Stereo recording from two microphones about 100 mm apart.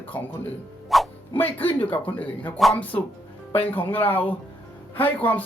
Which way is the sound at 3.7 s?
20° left (ahead or behind).